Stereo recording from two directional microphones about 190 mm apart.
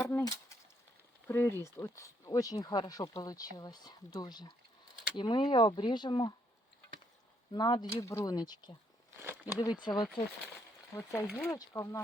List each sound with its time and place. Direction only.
0.0 s a sound: 15° left (ahead or behind)
1.3 s speech: 15° left (ahead or behind)
7.5 s speech: 20° left (ahead or behind)
11.3 s speech: 5° left (ahead or behind)
11.5 s speech: 15° left (ahead or behind)